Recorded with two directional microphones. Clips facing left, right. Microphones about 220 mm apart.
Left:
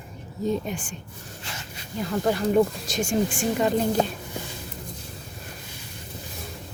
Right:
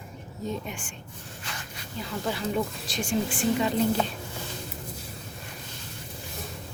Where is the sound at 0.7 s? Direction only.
35° left (ahead or behind).